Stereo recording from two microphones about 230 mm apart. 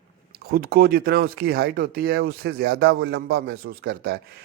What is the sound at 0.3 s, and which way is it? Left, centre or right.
Speech, right.